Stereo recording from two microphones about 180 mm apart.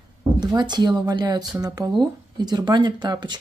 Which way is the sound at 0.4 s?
25° right (ahead or behind).